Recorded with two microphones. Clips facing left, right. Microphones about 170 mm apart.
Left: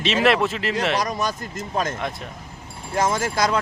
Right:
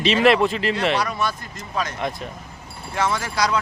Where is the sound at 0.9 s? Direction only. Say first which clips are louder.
Even; 40° left (ahead or behind).